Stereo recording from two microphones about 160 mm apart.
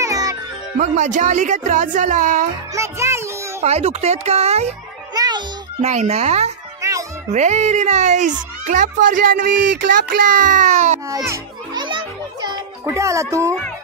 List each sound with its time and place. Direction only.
0.0 s music: 20° right (ahead or behind)
0.7 s speech: 50° right (ahead or behind)
2.7 s music: 20° right (ahead or behind)
3.6 s speech: 45° right (ahead or behind)
5.1 s music: 25° right (ahead or behind)
5.8 s speech: 45° right (ahead or behind)
6.8 s music: 20° right (ahead or behind)
7.3 s speech: 45° right (ahead or behind)
11.1 s children playing: 20° right (ahead or behind)
11.8 s music: 30° right (ahead or behind)